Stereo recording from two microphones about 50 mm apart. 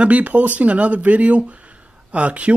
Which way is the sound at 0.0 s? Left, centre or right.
Right.